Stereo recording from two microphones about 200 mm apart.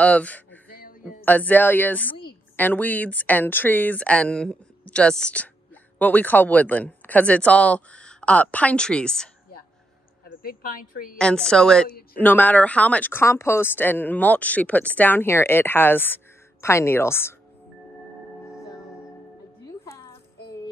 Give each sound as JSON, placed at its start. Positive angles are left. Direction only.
{"t": 0.0, "sound": "speech", "side_deg": 5}
{"t": 0.7, "sound": "a sound", "side_deg": 45}
{"t": 1.2, "sound": "speech", "side_deg": 10}
{"t": 10.2, "sound": "a woman's voice", "side_deg": 45}
{"t": 11.1, "sound": "a woman's voice", "side_deg": 5}
{"t": 19.6, "sound": "music", "side_deg": 15}